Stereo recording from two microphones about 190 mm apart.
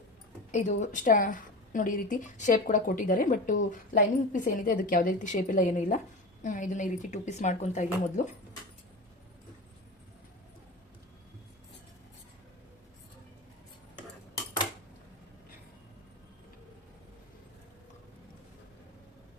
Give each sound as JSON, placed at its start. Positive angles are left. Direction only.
{"t": 0.5, "sound": "a woman's voice", "side_deg": 40}